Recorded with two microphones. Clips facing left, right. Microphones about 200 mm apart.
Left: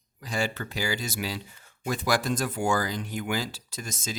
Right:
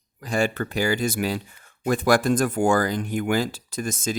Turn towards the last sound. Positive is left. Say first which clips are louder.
# right 9 dB
turn(degrees=-55)  # may be behind; listen again after turning